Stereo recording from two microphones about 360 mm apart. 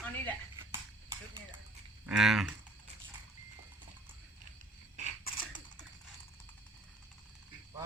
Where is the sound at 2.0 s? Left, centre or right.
Centre.